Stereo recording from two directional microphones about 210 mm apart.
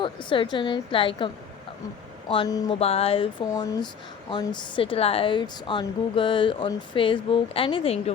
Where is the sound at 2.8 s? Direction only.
30° left (ahead or behind).